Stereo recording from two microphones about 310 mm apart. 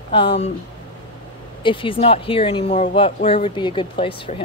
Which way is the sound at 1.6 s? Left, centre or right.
Centre.